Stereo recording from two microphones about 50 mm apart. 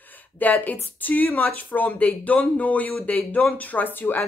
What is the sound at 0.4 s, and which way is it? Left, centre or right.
Speech, left.